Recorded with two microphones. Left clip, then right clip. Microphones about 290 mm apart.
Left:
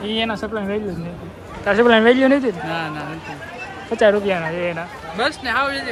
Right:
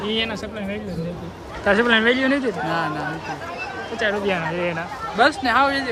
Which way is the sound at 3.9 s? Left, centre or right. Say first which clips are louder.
Left 6 dB; centre.